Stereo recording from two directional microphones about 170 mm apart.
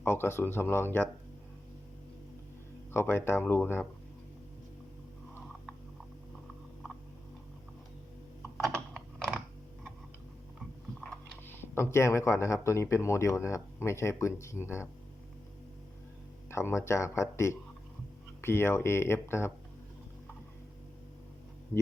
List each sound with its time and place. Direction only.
0.0 s speech: 15° left (ahead or behind)
2.9 s speech: 15° left (ahead or behind)
8.5 s typing: centre (ahead or behind)
11.0 s a sound: 10° left (ahead or behind)
12.6 s speech: 15° left (ahead or behind)
16.5 s speech: 15° left (ahead or behind)